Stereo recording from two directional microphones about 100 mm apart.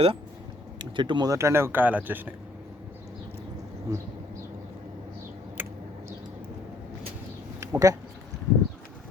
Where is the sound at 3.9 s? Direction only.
35° right (ahead or behind).